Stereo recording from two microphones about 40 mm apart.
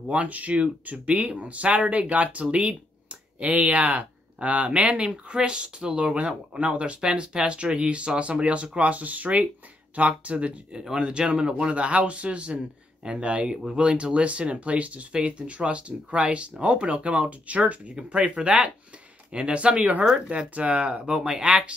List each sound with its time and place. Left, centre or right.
0.1 s speech: right
10.8 s speech: centre
21.4 s speech: centre